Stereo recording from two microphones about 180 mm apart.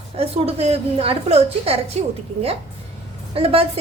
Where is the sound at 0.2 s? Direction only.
35° right (ahead or behind).